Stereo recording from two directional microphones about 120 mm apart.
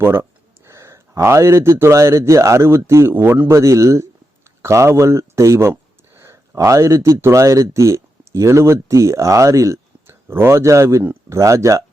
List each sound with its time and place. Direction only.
0.0 s a man's voice: 20° right (ahead or behind)